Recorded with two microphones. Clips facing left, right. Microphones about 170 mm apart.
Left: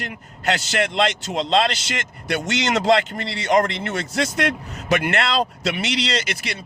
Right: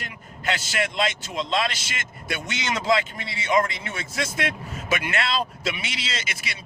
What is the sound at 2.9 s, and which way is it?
A man's voice, 70° left (ahead or behind).